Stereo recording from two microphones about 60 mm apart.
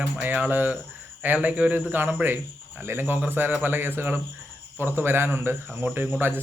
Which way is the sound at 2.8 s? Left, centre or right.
Right.